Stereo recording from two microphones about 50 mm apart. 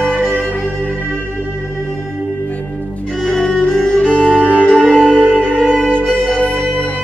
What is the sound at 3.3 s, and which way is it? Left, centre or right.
Music, centre.